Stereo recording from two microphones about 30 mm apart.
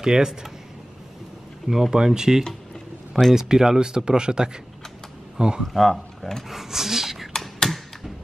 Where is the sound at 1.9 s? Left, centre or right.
Right.